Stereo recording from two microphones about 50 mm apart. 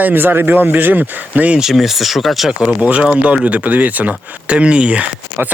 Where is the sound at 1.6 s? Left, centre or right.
Centre.